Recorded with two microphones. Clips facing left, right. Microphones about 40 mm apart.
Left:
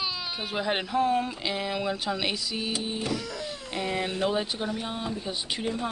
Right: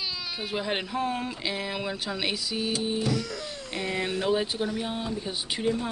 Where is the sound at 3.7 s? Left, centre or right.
Centre.